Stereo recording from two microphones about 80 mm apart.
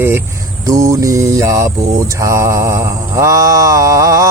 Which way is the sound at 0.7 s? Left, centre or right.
Right.